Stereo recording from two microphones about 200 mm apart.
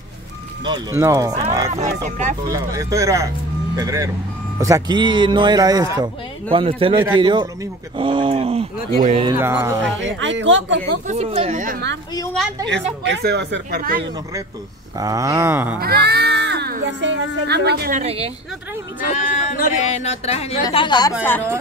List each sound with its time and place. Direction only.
0.7 s speech: 15° right (ahead or behind)
2.0 s speech: 35° right (ahead or behind)
2.4 s a man's voice: 15° right (ahead or behind)
9.3 s speech: 10° right (ahead or behind)
9.9 s speech: 65° right (ahead or behind)
11.1 s speech: 30° right (ahead or behind)
11.6 s a woman's voice: 45° right (ahead or behind)
12.6 s speech: 60° right (ahead or behind); by 14.0 s 45° right (ahead or behind)
15.0 s speech: 15° right (ahead or behind)
15.8 s speech: 50° right (ahead or behind)
17.9 s speech: 30° right (ahead or behind)
19.3 s a woman's voice: 40° left (ahead or behind); by 21.1 s 25° left (ahead or behind)
21.2 s speech: 10° left (ahead or behind)